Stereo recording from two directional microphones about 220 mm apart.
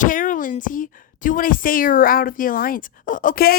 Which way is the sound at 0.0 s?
35° left (ahead or behind).